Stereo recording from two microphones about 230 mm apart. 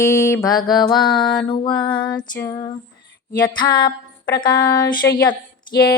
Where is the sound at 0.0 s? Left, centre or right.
Centre.